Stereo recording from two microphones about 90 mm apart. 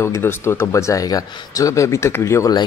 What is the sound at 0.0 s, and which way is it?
Speech, 30° left (ahead or behind).